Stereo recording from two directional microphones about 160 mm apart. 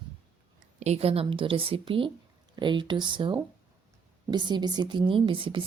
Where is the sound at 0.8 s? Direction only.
40° right (ahead or behind).